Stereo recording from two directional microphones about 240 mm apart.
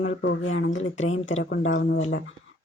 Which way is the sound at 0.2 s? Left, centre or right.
Left.